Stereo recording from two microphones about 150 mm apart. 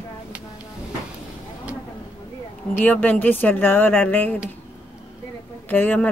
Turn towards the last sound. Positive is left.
turn(degrees=10)  # may be behind; listen again after turning